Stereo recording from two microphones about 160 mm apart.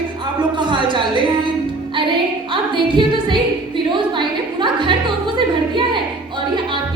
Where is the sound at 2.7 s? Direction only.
30° right (ahead or behind).